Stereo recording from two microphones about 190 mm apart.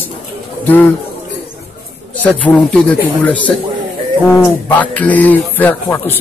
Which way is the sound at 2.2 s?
10° left (ahead or behind).